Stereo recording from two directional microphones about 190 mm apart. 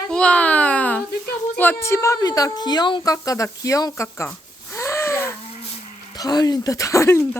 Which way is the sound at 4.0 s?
15° left (ahead or behind).